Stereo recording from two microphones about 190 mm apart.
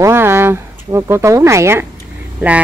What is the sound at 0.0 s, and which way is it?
Speech, 15° right (ahead or behind).